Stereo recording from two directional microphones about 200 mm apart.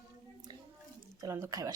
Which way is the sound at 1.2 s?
15° right (ahead or behind).